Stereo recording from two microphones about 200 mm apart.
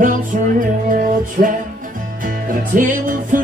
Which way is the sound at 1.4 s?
50° right (ahead or behind).